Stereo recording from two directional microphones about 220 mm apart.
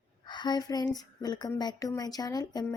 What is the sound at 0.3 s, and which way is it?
Speech, 20° left (ahead or behind).